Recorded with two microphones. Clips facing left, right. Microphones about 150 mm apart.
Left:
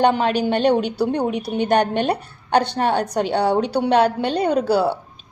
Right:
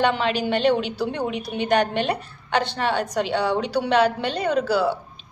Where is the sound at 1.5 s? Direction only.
40° left (ahead or behind).